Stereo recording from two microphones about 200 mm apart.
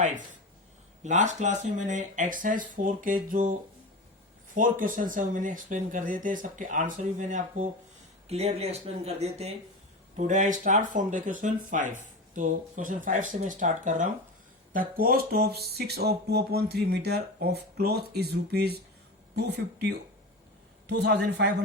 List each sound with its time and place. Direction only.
1.0 s speech: 35° right (ahead or behind)
4.5 s a man's voice: 40° right (ahead or behind)